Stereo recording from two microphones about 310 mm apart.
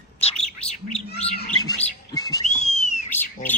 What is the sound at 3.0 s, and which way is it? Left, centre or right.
Bird, centre.